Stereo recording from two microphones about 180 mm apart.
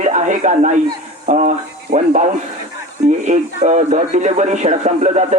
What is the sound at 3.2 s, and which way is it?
A man's voice, 40° right (ahead or behind).